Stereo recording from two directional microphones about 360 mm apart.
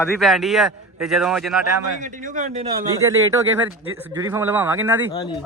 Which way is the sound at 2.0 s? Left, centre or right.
Right.